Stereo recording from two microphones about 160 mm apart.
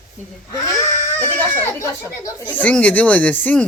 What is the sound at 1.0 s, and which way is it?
Speech, 15° left (ahead or behind).